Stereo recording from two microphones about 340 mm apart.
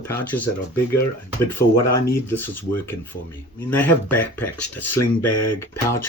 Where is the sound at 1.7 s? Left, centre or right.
Left.